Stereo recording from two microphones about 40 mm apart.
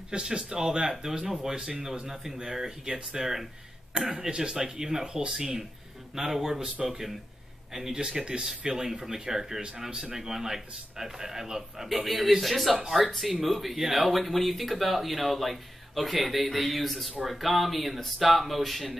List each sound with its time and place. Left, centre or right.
0.1 s speech: right; by 18.9 s centre